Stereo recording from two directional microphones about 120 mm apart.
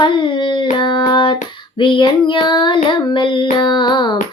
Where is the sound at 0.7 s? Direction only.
40° left (ahead or behind).